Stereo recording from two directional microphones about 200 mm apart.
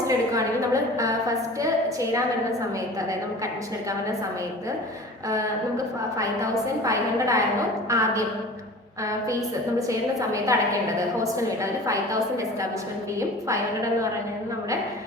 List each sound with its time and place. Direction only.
0.1 s a woman's voice: 15° right (ahead or behind)
5.3 s a woman's voice: 15° right (ahead or behind)
9.3 s a woman's voice: 15° right (ahead or behind)